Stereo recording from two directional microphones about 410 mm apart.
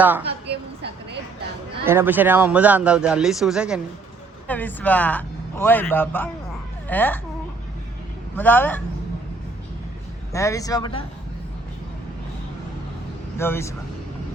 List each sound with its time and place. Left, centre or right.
0.0 s speech: centre
0.4 s speech: right
1.7 s speech: centre
8.4 s speech: centre
10.3 s speech: centre
13.4 s speech: centre